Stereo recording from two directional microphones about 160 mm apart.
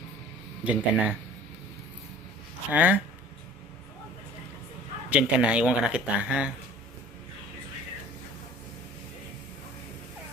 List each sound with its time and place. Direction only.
0.6 s speech: 10° right (ahead or behind)
2.6 s speech: 10° right (ahead or behind)
5.0 s speech: 5° right (ahead or behind)